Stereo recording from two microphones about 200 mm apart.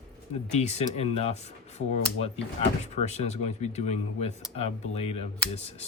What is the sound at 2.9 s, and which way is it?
Speech, 35° left (ahead or behind).